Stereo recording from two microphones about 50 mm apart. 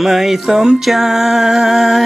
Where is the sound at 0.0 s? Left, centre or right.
Centre.